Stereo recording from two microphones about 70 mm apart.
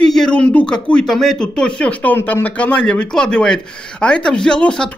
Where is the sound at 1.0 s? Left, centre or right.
Centre.